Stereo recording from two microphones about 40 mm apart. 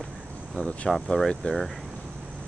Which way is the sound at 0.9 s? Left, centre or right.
Centre.